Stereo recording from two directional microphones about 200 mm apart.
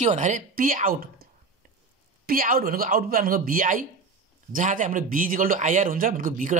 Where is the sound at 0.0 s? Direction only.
35° right (ahead or behind).